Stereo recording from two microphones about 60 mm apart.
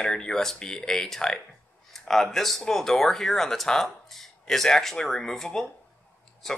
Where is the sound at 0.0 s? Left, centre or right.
Centre.